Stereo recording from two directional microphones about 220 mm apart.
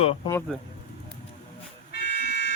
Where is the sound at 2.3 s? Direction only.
50° left (ahead or behind).